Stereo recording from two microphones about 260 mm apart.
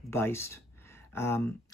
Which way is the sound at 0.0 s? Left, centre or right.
Centre.